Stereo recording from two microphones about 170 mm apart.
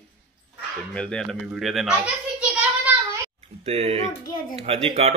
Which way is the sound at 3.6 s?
35° right (ahead or behind).